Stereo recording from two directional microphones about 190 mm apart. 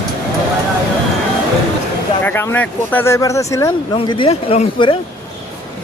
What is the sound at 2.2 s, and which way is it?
Speech, 10° left (ahead or behind).